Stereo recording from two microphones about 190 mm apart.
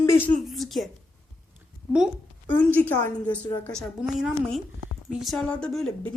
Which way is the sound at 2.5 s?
10° left (ahead or behind).